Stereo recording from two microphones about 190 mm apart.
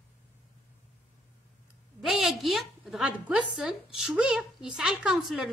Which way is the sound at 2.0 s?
Centre (ahead or behind).